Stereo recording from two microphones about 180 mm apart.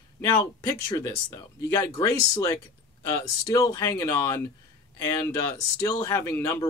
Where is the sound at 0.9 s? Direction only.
20° left (ahead or behind).